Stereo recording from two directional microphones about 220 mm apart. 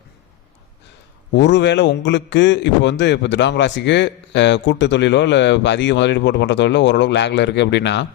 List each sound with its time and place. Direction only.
1.3 s a man's voice: 55° left (ahead or behind)